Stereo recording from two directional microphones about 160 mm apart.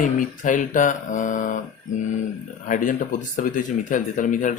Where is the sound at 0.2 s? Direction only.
55° left (ahead or behind).